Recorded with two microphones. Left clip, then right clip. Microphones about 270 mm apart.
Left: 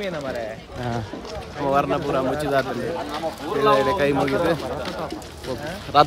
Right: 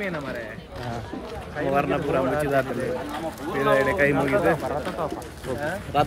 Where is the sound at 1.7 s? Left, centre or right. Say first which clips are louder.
Left 2 dB; centre.